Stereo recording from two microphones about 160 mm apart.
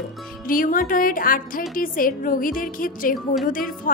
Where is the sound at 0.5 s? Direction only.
60° left (ahead or behind).